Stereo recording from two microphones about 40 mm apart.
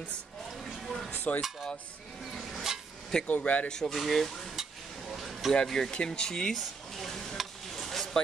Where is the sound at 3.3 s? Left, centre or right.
Left.